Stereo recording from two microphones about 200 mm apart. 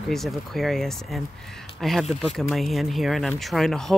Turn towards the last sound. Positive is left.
turn(degrees=0)  # may be behind; listen again after turning